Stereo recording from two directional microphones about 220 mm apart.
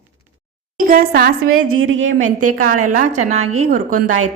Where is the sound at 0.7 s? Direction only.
40° right (ahead or behind).